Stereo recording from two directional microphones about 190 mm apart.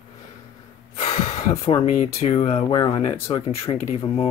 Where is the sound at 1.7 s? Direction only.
35° left (ahead or behind).